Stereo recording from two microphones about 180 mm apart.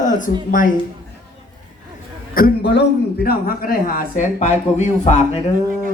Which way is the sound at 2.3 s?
60° left (ahead or behind).